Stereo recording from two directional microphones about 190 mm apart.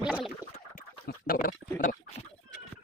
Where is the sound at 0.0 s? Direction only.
5° right (ahead or behind).